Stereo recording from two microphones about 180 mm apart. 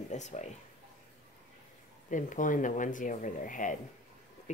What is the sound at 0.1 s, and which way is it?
Speech, 40° left (ahead or behind).